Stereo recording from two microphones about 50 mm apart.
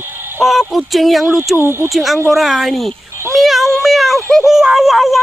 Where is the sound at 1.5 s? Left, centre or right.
Right.